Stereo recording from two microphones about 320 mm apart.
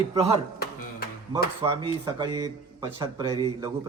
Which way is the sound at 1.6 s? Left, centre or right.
Centre.